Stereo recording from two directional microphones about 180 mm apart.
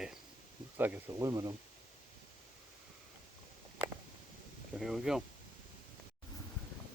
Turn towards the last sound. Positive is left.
turn(degrees=0)  # may be behind; listen again after turning